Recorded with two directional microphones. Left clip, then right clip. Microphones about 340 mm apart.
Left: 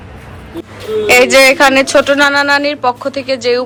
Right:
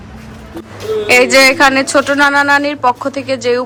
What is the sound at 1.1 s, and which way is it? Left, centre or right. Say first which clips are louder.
A woman's voice: left 1 dB; centre.